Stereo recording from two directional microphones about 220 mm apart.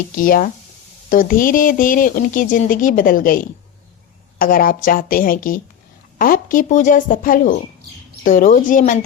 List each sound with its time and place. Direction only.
0.2 s speech: 40° left (ahead or behind)